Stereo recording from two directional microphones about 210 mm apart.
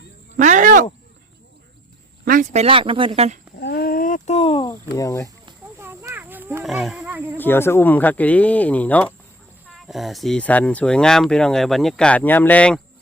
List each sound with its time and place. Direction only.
0.3 s cricket: 35° right (ahead or behind)
2.2 s speech: 40° right (ahead or behind)
3.6 s a sound: 50° left (ahead or behind); by 4.7 s 25° left (ahead or behind)
4.7 s speech: 15° left (ahead or behind)
5.8 s wild animals: 10° right (ahead or behind)
7.3 s speech: 10° left (ahead or behind)